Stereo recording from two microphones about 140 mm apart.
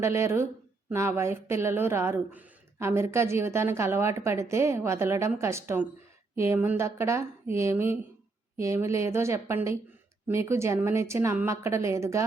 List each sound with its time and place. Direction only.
0.0 s a woman's voice: 20° right (ahead or behind)